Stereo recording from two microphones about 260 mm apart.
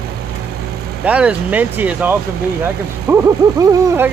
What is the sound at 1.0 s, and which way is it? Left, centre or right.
Speech, centre.